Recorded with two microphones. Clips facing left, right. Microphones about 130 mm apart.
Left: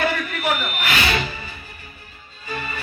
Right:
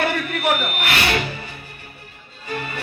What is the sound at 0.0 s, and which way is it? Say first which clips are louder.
Music: right 1 dB; 60° right (ahead or behind).